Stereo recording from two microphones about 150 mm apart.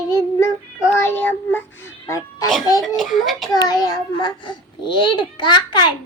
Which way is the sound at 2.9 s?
Centre (ahead or behind).